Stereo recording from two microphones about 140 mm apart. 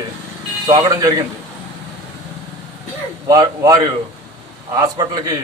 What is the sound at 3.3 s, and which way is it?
A man's voice, 25° right (ahead or behind).